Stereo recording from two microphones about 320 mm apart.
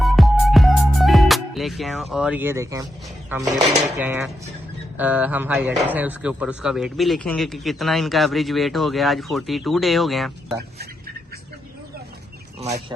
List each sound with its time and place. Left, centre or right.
0.0 s music: centre
3.2 s speech: centre
12.5 s speech: right